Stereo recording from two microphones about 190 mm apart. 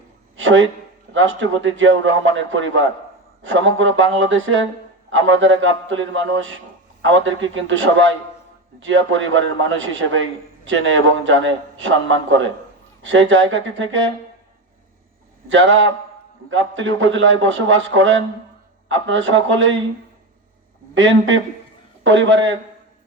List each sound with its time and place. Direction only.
0.3 s a sound: 85° right
1.1 s a man's voice: 85° right
8.8 s a man's voice: 90° right
15.4 s a man's voice: 85° right
20.9 s a man's voice: 80° right